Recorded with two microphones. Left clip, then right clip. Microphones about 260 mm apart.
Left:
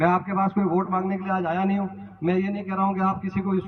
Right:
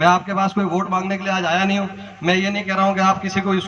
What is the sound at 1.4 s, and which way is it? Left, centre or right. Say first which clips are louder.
A man's voice: right 7 dB; right.